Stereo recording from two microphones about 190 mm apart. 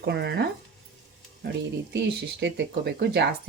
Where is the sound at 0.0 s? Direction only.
60° right (ahead or behind).